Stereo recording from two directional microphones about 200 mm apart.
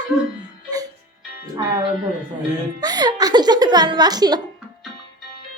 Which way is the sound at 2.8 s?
20° right (ahead or behind).